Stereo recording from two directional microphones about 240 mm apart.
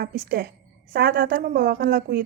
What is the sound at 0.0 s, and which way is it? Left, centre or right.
A woman's voice, right.